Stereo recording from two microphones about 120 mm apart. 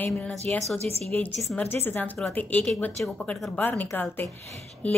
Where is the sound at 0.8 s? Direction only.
60° right (ahead or behind).